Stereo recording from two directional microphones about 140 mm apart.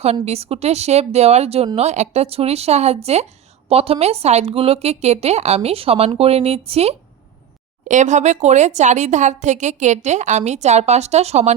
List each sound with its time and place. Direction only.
0.0 s speech: 50° right (ahead or behind)
7.9 s speech: 60° right (ahead or behind)